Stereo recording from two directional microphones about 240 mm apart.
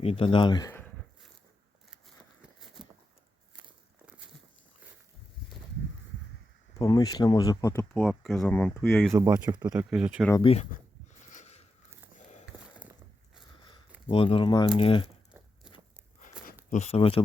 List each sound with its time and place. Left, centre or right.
0.0 s speech: left
6.7 s speech: centre
8.0 s speech: centre
9.1 s speech: centre
9.7 s speech: centre
10.4 s speech: left
11.2 s a sound: left
14.1 s speech: left
16.6 s speech: left